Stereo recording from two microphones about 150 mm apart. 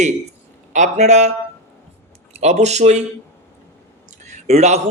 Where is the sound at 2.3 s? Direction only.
45° right (ahead or behind).